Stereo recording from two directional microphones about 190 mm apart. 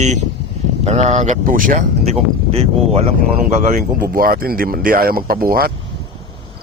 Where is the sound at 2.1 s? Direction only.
30° right (ahead or behind); by 5.7 s 50° right (ahead or behind).